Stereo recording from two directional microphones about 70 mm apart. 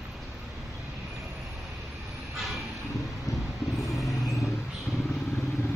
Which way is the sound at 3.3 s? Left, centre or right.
Left.